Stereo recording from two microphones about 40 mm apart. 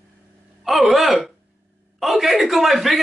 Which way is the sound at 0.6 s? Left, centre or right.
Centre.